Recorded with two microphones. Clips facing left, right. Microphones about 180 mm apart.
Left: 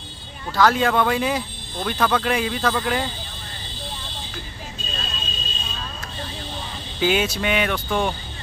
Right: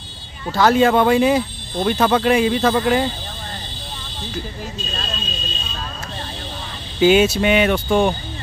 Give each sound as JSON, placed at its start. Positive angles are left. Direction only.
{"t": 0.5, "sound": "speech", "side_deg": -25}
{"t": 7.0, "sound": "speech", "side_deg": -25}